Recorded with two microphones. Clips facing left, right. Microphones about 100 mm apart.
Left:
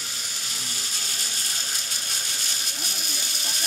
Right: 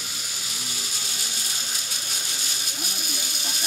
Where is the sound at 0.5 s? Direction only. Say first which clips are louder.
Right 1 dB; 5° right (ahead or behind).